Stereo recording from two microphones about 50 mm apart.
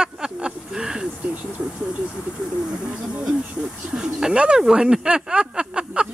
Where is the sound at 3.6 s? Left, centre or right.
Centre.